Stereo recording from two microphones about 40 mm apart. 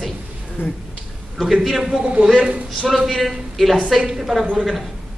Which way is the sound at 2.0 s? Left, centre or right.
Right.